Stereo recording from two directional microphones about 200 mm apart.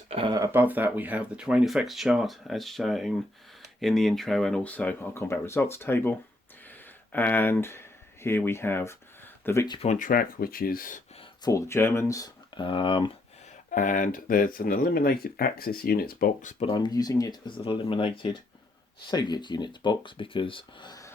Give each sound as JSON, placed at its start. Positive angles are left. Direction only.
{"t": 0.1, "sound": "speech", "side_deg": -25}
{"t": 9.7, "sound": "speech", "side_deg": 35}
{"t": 11.4, "sound": "speech", "side_deg": 15}
{"t": 13.7, "sound": "speech", "side_deg": 40}